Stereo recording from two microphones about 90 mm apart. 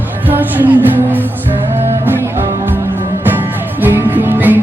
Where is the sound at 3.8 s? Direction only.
20° right (ahead or behind).